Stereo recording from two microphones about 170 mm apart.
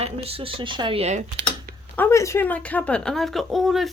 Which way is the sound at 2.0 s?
15° left (ahead or behind).